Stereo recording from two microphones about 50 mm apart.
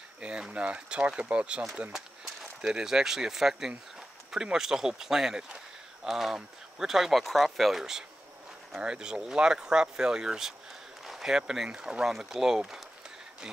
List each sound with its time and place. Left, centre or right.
0.2 s speech: centre